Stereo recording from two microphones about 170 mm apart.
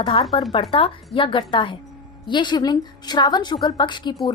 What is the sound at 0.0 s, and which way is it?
A woman's voice, 35° left (ahead or behind).